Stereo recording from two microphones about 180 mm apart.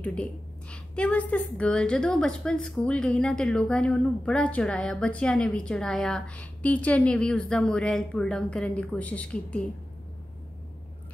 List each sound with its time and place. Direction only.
0.0 s a woman's voice: 5° left (ahead or behind)